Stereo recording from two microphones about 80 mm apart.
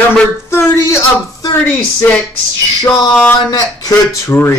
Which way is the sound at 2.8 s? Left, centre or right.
Left.